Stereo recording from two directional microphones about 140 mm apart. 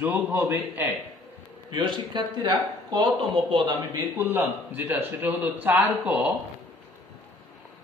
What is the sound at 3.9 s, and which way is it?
A man's voice, 15° right (ahead or behind).